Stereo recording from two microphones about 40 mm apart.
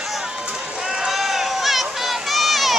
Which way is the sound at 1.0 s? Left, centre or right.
Centre.